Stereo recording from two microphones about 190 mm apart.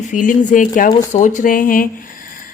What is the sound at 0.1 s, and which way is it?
Speech, 45° left (ahead or behind).